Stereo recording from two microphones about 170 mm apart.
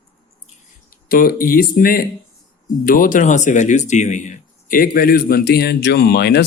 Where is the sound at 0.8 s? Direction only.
60° left (ahead or behind).